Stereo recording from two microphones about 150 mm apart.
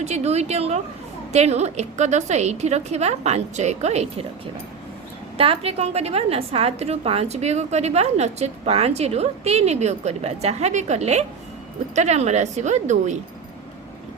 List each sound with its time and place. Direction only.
0.0 s a woman's voice: 45° right (ahead or behind)
5.4 s a woman's voice: 40° right (ahead or behind)